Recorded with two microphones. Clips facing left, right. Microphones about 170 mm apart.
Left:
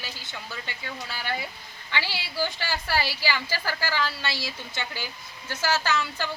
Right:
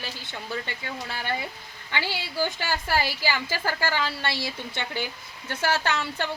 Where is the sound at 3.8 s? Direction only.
55° right (ahead or behind).